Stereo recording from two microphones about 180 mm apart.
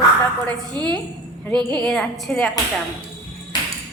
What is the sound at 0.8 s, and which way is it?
Speech, 25° right (ahead or behind).